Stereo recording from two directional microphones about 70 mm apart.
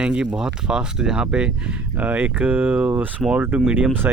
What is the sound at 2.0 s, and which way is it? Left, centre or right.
Speech, right.